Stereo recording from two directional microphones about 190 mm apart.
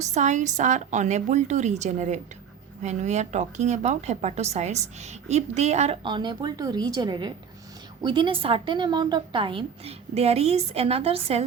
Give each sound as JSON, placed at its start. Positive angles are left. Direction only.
{"t": 0.0, "sound": "a woman's voice", "side_deg": -40}